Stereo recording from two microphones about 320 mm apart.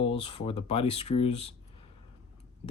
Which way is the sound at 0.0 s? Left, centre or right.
Centre.